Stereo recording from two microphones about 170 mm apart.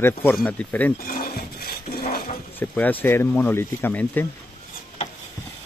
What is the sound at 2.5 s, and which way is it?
Speech, 10° left (ahead or behind).